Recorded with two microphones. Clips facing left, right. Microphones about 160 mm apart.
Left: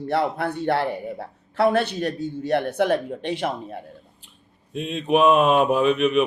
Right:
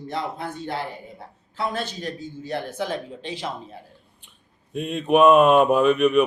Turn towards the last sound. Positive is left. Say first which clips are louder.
# right 2 dB
turn(degrees=0)  # may be behind; listen again after turning